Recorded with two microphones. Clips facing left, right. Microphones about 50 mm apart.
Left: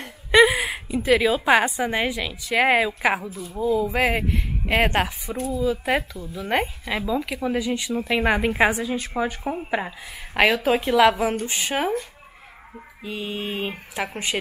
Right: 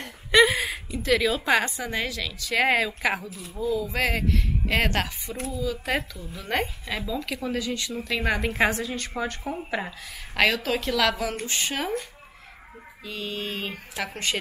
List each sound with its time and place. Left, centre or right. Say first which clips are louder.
0.0 s a sound: left 3 dB; centre
0.7 s a woman's voice: left 4 dB; left
13.0 s a woman's voice: left 3 dB; centre